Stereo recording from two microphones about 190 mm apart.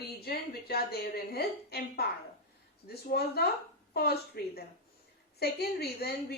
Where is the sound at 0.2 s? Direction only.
55° left (ahead or behind).